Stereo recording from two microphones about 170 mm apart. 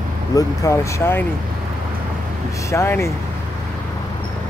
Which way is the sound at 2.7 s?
15° left (ahead or behind).